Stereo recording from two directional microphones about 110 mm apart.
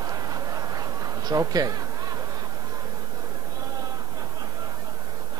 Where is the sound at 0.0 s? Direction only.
35° right (ahead or behind).